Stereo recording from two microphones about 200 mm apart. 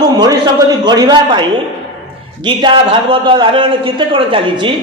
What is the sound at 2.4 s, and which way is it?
A man's voice, 25° right (ahead or behind).